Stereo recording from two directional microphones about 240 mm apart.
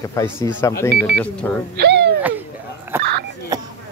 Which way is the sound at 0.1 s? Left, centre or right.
Centre.